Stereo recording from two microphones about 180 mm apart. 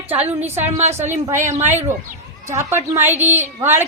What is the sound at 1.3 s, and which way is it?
Speech, 40° right (ahead or behind).